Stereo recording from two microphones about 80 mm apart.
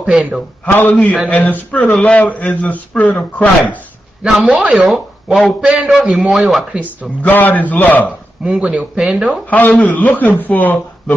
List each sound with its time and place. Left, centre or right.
0.0 s speech: centre
0.7 s a man's voice: left
4.2 s a man's voice: centre
4.5 s speech: centre
7.2 s a man's voice: left
8.5 s speech: centre
9.8 s a man's voice: left